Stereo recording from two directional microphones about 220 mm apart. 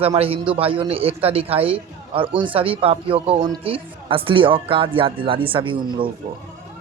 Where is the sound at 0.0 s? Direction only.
25° right (ahead or behind).